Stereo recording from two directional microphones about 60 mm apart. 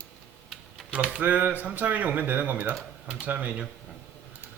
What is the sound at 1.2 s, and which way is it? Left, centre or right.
A man's voice, right.